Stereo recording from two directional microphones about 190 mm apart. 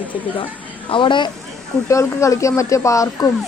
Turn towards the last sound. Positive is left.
turn(degrees=15)  # may be behind; listen again after turning